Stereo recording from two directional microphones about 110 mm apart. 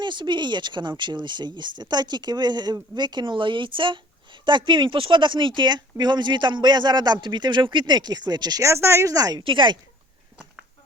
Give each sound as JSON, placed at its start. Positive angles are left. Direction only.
{"t": 0.0, "sound": "speech", "side_deg": -45}
{"t": 8.6, "sound": "a woman's voice", "side_deg": -25}
{"t": 9.4, "sound": "speech", "side_deg": -50}